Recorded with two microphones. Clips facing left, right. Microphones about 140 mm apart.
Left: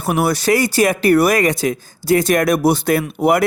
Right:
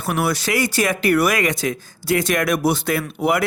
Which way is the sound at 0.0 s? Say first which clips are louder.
Left 4 dB; 40° left (ahead or behind).